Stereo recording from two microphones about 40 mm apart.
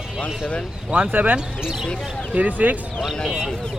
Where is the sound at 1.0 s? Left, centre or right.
Right.